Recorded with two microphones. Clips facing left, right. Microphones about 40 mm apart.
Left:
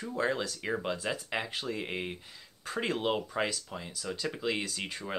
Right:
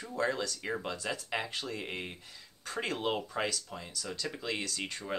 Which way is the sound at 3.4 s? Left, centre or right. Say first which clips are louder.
Left 1 dB; centre.